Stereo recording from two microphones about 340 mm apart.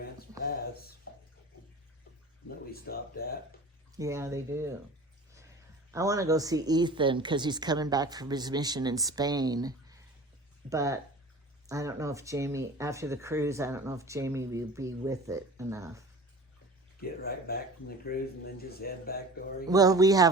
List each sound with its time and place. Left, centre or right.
0.4 s a sound: left
2.8 s speech: left
3.9 s speech: centre
5.9 s speech: centre
17.0 s speech: left
19.6 s speech: centre